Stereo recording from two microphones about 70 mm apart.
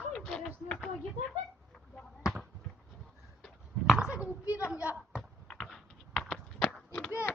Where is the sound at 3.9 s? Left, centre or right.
Centre.